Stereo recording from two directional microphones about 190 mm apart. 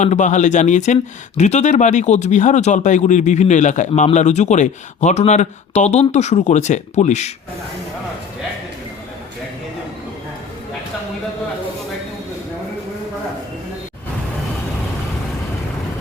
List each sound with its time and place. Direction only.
0.0 s speech: 40° left (ahead or behind)